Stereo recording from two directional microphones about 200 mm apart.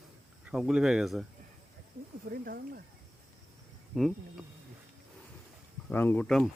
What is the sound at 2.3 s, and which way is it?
Speech, 50° right (ahead or behind).